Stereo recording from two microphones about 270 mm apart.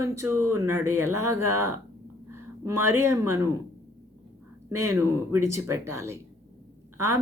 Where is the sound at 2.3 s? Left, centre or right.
Centre.